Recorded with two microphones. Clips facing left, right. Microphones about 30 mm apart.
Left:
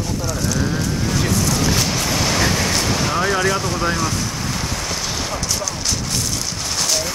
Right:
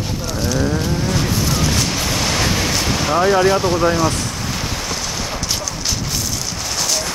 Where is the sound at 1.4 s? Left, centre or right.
Centre.